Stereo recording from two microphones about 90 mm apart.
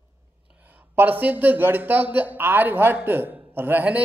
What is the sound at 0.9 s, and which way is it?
A man's voice, 20° right (ahead or behind).